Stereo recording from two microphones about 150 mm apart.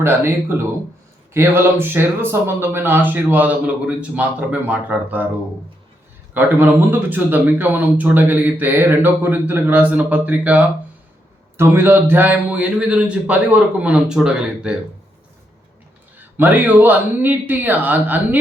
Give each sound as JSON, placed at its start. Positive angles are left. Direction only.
{"t": 0.0, "sound": "speech", "side_deg": -15}
{"t": 6.3, "sound": "speech", "side_deg": -15}
{"t": 16.4, "sound": "speech", "side_deg": -10}